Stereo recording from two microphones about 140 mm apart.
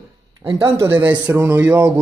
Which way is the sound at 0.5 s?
35° right (ahead or behind).